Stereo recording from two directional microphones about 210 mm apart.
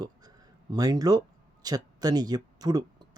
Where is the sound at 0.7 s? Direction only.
20° right (ahead or behind).